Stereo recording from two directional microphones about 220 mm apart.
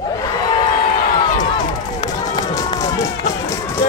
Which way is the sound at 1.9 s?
20° left (ahead or behind).